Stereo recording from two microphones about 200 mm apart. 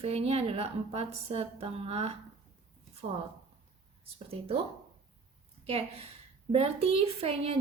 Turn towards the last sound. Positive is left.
turn(degrees=-30)  # may be behind; listen again after turning